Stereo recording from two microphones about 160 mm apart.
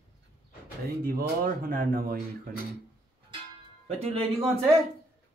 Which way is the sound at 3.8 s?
40° right (ahead or behind).